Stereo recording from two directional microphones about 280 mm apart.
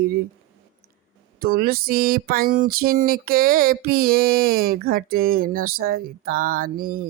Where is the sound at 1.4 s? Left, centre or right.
Right.